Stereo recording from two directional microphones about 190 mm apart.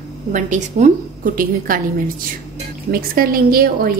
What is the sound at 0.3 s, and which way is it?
A woman's voice, 40° right (ahead or behind).